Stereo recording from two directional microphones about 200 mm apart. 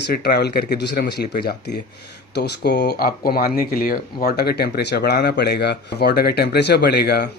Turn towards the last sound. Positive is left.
turn(degrees=55)  # may be behind; listen again after turning